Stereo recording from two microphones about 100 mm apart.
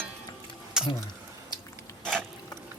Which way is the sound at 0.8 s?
5° right (ahead or behind).